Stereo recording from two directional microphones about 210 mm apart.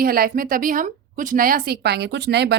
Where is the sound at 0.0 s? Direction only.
45° right (ahead or behind).